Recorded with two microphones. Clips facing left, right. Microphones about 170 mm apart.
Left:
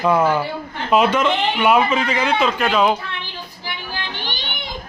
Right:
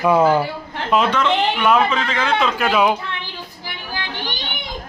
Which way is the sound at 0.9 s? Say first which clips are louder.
Left 1 dB; 10° left (ahead or behind).